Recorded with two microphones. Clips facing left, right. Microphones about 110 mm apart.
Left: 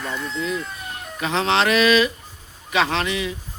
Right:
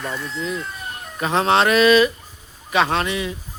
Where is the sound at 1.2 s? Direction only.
40° right (ahead or behind).